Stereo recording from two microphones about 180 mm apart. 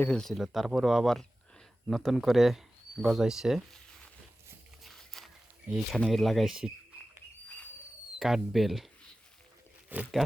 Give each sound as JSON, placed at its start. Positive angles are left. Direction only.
{"t": 0.0, "sound": "speech", "side_deg": 5}
{"t": 4.8, "sound": "a sound", "side_deg": 0}
{"t": 8.2, "sound": "speech", "side_deg": 0}
{"t": 9.9, "sound": "speech", "side_deg": -5}